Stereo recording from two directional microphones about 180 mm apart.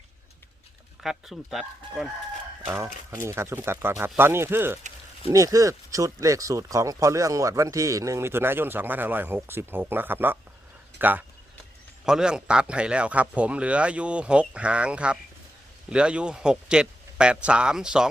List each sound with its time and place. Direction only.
1.0 s speech: centre (ahead or behind)